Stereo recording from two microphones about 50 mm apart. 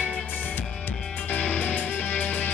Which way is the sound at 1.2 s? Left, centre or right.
Left.